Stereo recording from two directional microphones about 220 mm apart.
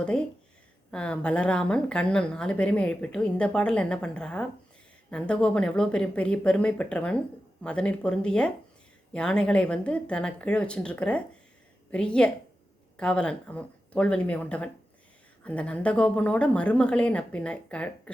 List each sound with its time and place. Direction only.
0.9 s speech: 5° left (ahead or behind)